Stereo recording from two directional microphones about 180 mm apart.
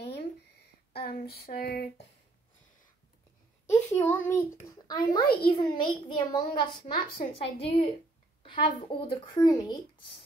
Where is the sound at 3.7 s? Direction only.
10° left (ahead or behind).